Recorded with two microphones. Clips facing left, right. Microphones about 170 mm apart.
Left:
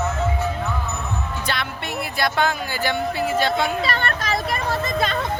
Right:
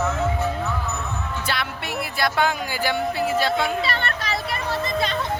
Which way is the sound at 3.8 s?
45° left (ahead or behind).